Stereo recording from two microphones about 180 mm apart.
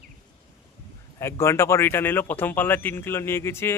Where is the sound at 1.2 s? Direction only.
15° left (ahead or behind).